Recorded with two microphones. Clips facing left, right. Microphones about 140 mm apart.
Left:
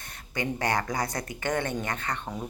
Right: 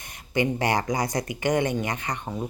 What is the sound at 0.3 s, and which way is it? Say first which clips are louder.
Speech: right 5 dB; 20° right (ahead or behind).